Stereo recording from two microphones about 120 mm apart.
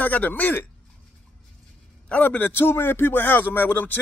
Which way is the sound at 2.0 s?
15° left (ahead or behind).